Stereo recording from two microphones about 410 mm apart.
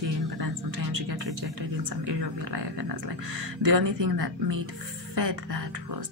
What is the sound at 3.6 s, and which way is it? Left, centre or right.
Speech, right.